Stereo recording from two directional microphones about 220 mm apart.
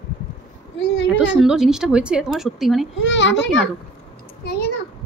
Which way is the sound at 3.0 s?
55° left (ahead or behind).